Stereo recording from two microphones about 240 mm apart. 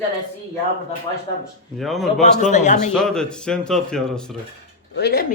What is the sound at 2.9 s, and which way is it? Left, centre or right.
A man's voice, centre.